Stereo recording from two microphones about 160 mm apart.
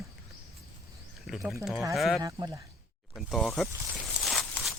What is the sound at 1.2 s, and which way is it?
Speech, centre (ahead or behind).